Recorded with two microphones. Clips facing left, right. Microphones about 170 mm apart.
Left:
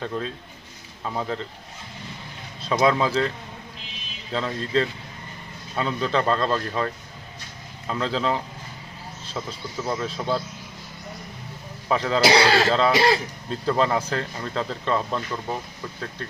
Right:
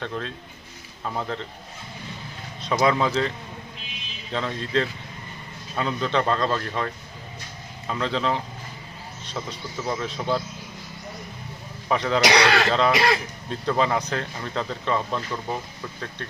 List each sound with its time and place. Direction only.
1.0 s speech: 5° left (ahead or behind)
2.6 s speech: centre (ahead or behind)
11.9 s speech: centre (ahead or behind)
12.2 s speech: 30° left (ahead or behind)
13.5 s speech: centre (ahead or behind)